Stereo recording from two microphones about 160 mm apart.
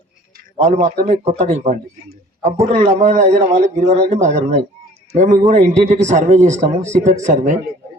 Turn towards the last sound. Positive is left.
turn(degrees=-50)  # may be behind; listen again after turning